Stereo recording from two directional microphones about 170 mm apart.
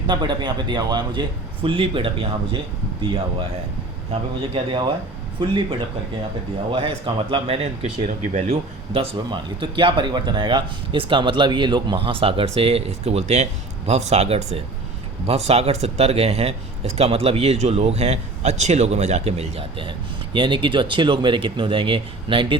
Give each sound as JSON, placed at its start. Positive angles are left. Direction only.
{"t": 0.1, "sound": "speech", "side_deg": -25}
{"t": 4.1, "sound": "speech", "side_deg": -30}
{"t": 6.7, "sound": "speech", "side_deg": -30}